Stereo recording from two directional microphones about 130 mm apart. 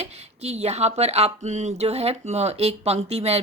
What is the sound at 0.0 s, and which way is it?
Speech, 55° right (ahead or behind).